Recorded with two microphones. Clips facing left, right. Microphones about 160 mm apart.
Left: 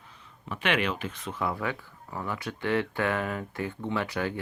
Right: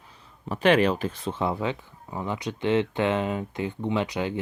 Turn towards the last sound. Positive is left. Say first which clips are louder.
# right 3 dB
turn(degrees=-20)  # may be behind; listen again after turning